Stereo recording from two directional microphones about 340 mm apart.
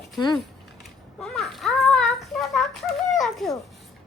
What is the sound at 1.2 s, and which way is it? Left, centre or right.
Child singing, centre.